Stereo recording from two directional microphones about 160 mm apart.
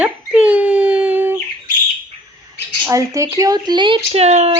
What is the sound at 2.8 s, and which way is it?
Speech, 20° right (ahead or behind).